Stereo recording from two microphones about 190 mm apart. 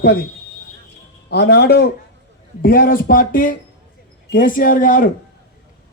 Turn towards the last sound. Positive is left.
turn(degrees=45)  # may be behind; listen again after turning